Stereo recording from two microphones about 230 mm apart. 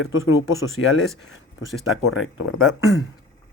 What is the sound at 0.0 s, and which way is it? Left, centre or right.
Speech, left.